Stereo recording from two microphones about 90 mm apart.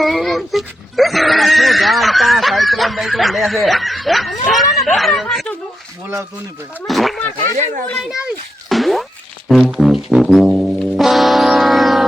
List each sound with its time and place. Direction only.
0.0 s speech: centre (ahead or behind)
6.8 s speech: centre (ahead or behind)
7.2 s speech: 20° left (ahead or behind)
8.7 s boing: centre (ahead or behind)
9.5 s music: centre (ahead or behind)